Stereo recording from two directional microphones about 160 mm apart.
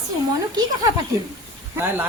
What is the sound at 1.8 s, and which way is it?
Speech, 15° right (ahead or behind).